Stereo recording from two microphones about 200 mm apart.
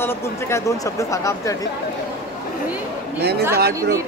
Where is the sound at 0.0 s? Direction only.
10° left (ahead or behind).